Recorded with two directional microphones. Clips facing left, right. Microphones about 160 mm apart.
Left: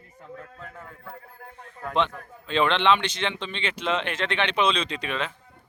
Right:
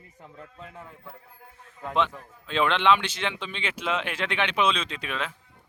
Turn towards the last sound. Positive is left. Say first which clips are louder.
# left 3 dB
turn(degrees=-5)  # may be behind; listen again after turning